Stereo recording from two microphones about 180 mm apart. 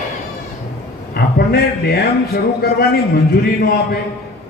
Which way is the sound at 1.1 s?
65° left (ahead or behind).